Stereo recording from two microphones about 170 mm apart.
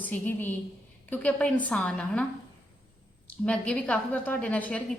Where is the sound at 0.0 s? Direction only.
10° left (ahead or behind).